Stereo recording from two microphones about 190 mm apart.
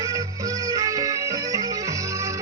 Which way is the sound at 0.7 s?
20° right (ahead or behind).